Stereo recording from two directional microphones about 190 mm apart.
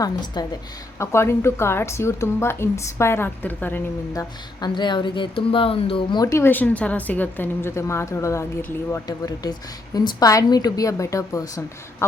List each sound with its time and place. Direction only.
0.0 s a woman's voice: 20° left (ahead or behind)